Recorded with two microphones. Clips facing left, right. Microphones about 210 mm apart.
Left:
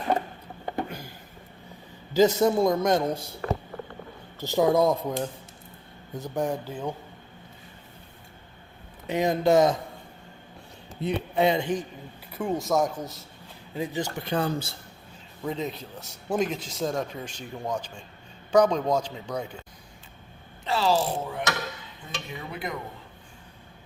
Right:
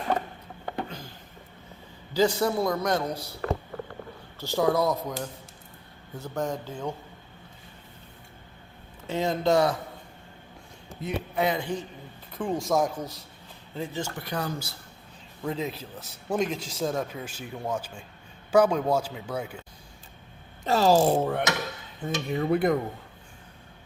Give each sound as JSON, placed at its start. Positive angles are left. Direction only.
{"t": 0.6, "sound": "a sound", "side_deg": 10}
{"t": 2.1, "sound": "a man's voice", "side_deg": 20}
{"t": 4.4, "sound": "a man's voice", "side_deg": 20}
{"t": 6.2, "sound": "speech", "side_deg": 10}
{"t": 9.0, "sound": "speech", "side_deg": 15}
{"t": 11.0, "sound": "a man's voice", "side_deg": 25}
{"t": 12.4, "sound": "a man's voice", "side_deg": 0}
{"t": 13.7, "sound": "a man's voice", "side_deg": 15}
{"t": 15.4, "sound": "a man's voice", "side_deg": 0}
{"t": 20.7, "sound": "speech", "side_deg": -45}